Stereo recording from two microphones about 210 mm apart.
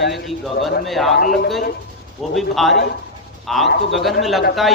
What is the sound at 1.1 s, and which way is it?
Speech, 50° left (ahead or behind).